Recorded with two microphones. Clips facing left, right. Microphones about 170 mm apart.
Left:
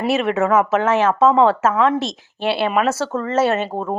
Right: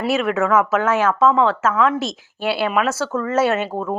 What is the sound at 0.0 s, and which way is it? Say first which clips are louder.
Speech: left 1 dB; centre (ahead or behind).